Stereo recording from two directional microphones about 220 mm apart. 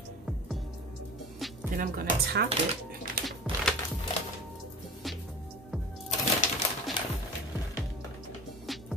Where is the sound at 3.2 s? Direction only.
45° right (ahead or behind).